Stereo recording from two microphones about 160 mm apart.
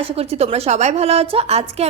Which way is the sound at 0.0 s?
40° right (ahead or behind).